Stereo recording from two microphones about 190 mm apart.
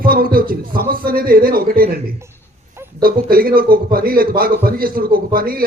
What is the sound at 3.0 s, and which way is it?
A man's voice, 50° right (ahead or behind).